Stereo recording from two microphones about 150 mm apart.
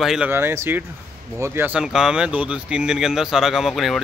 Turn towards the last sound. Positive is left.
turn(degrees=0)  # may be behind; listen again after turning